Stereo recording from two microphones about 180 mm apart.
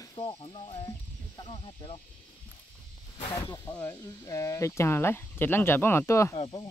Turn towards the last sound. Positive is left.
turn(degrees=30)  # may be behind; listen again after turning